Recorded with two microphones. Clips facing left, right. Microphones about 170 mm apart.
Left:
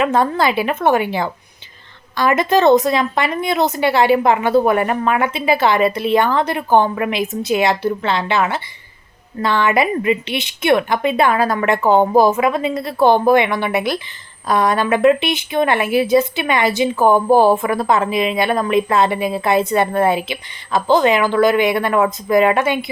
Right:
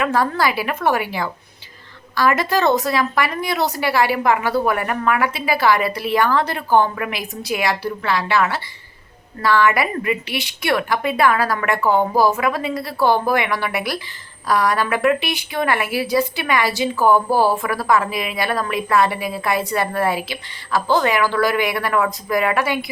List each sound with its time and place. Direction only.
0.0 s speech: 20° left (ahead or behind)